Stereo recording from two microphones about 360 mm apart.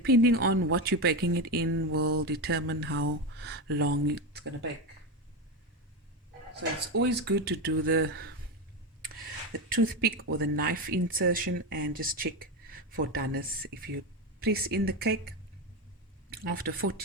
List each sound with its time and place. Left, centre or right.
0.0 s speech: right
2.1 s speech: right
6.6 s speech: right